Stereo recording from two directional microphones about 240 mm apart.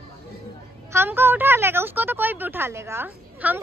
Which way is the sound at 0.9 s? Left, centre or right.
Centre.